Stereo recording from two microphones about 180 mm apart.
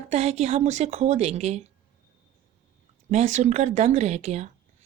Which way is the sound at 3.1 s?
40° right (ahead or behind).